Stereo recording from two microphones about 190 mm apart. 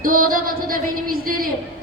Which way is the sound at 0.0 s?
45° right (ahead or behind).